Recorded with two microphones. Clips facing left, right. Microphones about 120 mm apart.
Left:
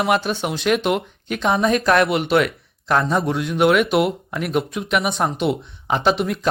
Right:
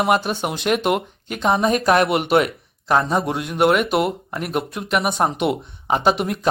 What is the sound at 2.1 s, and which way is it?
Speech, 55° right (ahead or behind).